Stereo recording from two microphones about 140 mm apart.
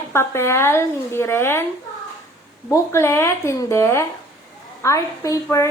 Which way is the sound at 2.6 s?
20° left (ahead or behind).